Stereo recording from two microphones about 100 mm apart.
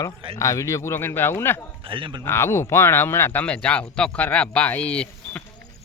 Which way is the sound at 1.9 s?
60° right (ahead or behind).